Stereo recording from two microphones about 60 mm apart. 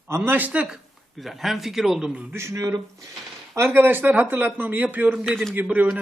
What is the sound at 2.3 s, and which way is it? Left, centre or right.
Speech, right.